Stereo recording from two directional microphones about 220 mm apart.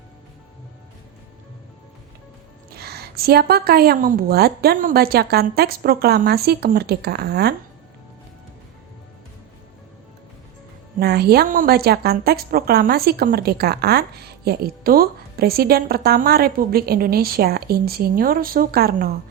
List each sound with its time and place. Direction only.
2.6 s a woman's voice: 45° right (ahead or behind)
11.0 s a woman's voice: 45° right (ahead or behind)